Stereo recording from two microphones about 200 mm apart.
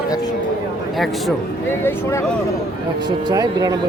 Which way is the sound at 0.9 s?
Centre (ahead or behind).